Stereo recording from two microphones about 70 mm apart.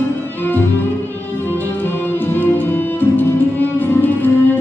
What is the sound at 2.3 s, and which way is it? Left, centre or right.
Music, left.